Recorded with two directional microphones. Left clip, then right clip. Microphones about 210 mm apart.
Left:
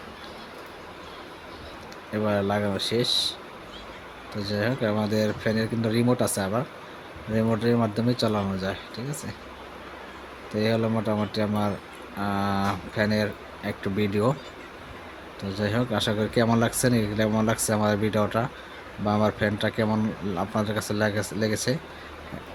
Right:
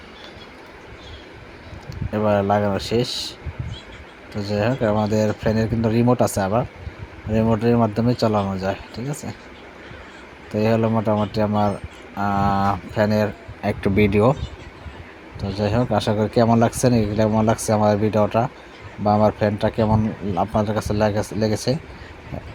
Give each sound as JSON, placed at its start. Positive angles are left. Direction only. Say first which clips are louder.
{"t": 2.1, "sound": "speech", "louder": "right 7 dB", "side_deg": -10}
{"t": 4.4, "sound": "speech", "louder": "right 5 dB", "side_deg": -10}
{"t": 10.5, "sound": "speech", "louder": "right 6 dB", "side_deg": -10}
{"t": 13.7, "sound": "speech", "louder": "right 9 dB", "side_deg": -25}
{"t": 15.4, "sound": "speech", "louder": "right 5 dB", "side_deg": -10}